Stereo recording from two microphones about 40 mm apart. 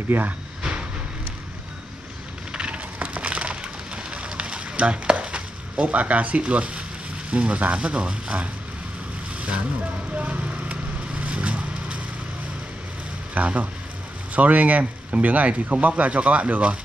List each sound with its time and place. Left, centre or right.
0.1 s speech: right
0.6 s vehicle: right
2.5 s a sound: right
7.2 s speech: right
10.1 s vehicle: right
13.3 s speech: right